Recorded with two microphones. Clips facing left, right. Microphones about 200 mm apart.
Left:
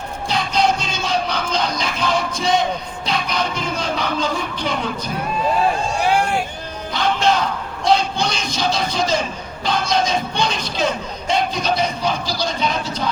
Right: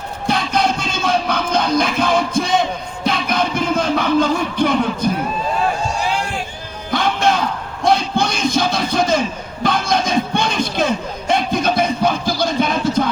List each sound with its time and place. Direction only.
0.3 s music: 55° right (ahead or behind)
6.0 s run: 55° left (ahead or behind)
6.9 s music: 50° right (ahead or behind)
7.9 s a sound: 55° right (ahead or behind)
9.6 s music: 55° right (ahead or behind)